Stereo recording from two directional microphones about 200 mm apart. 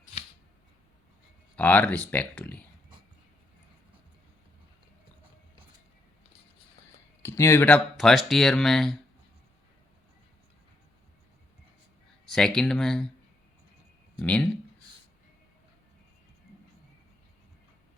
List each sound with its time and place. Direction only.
0.0 s scissors: 35° left (ahead or behind)
1.5 s speech: 5° left (ahead or behind)
7.2 s speech: 15° left (ahead or behind)
12.2 s speech: centre (ahead or behind)
14.2 s speech: 5° left (ahead or behind)